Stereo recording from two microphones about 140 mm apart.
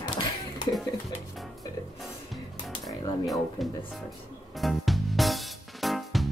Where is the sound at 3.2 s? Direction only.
Centre (ahead or behind).